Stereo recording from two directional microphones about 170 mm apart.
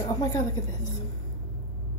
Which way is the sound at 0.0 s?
20° left (ahead or behind).